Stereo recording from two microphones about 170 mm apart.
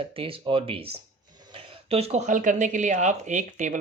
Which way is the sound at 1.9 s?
40° right (ahead or behind).